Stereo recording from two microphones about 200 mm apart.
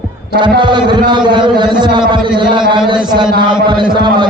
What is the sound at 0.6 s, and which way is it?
A man's voice, 25° right (ahead or behind).